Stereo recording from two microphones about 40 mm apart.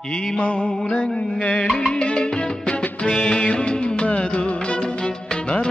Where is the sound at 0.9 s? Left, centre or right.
Left.